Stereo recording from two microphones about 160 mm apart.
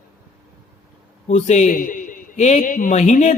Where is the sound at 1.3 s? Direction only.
50° left (ahead or behind).